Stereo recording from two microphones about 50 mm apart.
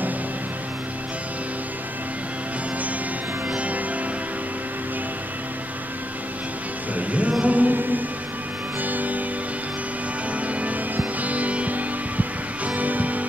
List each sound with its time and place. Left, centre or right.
3.4 s music: right
7.0 s music: right
10.4 s music: right